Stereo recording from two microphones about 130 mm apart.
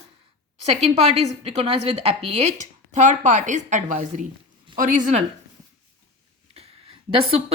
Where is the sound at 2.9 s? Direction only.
70° right (ahead or behind).